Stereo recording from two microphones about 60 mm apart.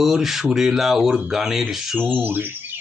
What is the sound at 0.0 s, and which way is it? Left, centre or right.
Speech, centre.